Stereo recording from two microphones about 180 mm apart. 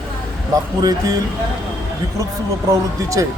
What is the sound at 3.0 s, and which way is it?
Speech, 15° right (ahead or behind).